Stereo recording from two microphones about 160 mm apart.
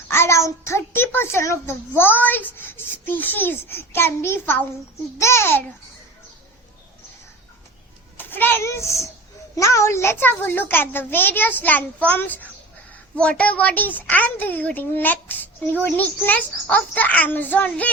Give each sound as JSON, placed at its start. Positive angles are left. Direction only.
{"t": 0.1, "sound": "a child's voice", "side_deg": 15}
{"t": 8.2, "sound": "a child's voice", "side_deg": 15}